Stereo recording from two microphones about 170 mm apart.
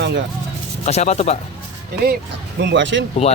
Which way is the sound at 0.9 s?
40° left (ahead or behind).